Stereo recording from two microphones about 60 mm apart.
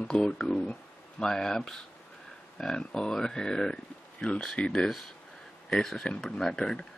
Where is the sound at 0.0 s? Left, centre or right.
Centre.